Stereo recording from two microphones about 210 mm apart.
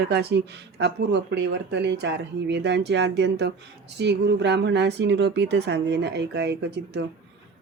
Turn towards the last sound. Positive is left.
turn(degrees=-55)  # may be behind; listen again after turning